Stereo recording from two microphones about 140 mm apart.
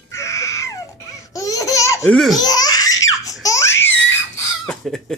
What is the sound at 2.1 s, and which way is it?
Speech, centre (ahead or behind).